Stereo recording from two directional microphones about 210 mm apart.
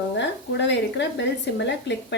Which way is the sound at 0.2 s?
55° left (ahead or behind).